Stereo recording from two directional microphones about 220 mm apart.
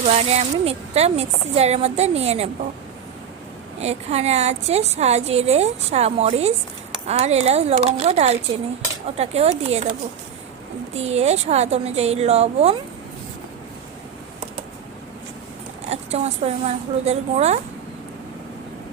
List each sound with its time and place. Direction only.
0.0 s a woman's voice: 30° right (ahead or behind)
3.8 s a woman's voice: 30° right (ahead or behind)
10.9 s a woman's voice: 30° right (ahead or behind)
15.9 s a woman's voice: 30° right (ahead or behind)